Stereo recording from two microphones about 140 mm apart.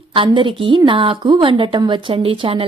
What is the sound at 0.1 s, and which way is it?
A woman's voice, 40° right (ahead or behind).